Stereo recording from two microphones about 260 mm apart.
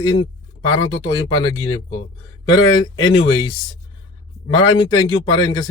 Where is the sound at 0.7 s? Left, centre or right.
Centre.